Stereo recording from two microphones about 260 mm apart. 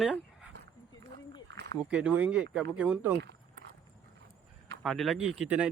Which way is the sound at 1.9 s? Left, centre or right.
Centre.